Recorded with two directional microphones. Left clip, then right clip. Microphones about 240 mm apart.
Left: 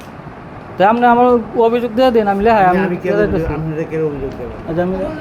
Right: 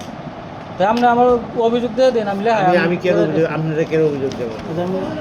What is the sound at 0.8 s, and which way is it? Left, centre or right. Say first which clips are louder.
A man's voice: left 3 dB; left.